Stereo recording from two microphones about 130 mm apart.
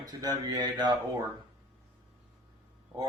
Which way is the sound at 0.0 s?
30° right (ahead or behind).